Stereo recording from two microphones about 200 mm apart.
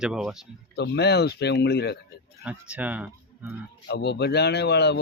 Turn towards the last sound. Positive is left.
turn(degrees=55)  # may be behind; listen again after turning